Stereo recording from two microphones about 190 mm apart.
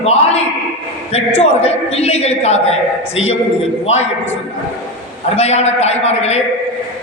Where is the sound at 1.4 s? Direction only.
35° left (ahead or behind).